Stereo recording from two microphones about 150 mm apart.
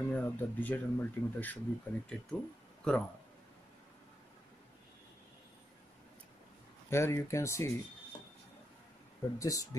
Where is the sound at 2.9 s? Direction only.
5° left (ahead or behind).